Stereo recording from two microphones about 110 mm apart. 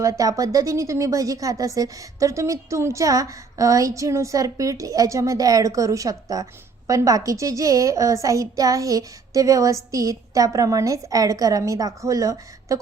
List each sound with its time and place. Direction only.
0.0 s a woman's voice: 30° right (ahead or behind)